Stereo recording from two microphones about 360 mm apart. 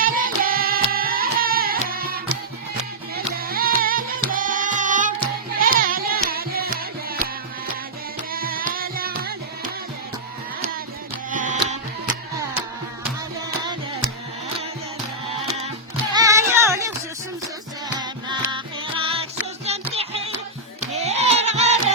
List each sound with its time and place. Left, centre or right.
0.0 s music: right
8.3 s music: right
11.3 s music: right
15.4 s music: centre
16.1 s child singing: centre
18.0 s music: centre